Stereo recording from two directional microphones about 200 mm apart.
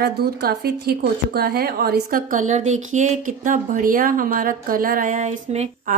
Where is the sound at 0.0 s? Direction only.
50° right (ahead or behind).